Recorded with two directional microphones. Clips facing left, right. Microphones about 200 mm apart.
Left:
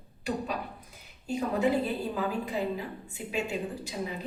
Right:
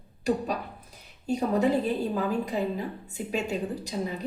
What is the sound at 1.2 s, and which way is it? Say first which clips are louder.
A woman's voice: right 3 dB; 40° right (ahead or behind).